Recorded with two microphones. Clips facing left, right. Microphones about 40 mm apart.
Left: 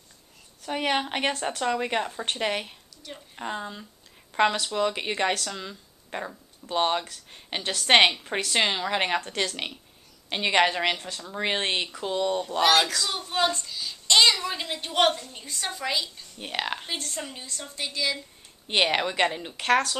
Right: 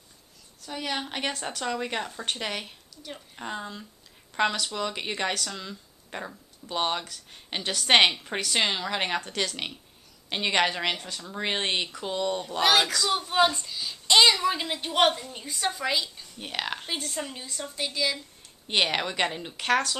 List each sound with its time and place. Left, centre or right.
0.6 s a woman's voice: left
1.0 s speech: left
1.3 s a woman's voice: centre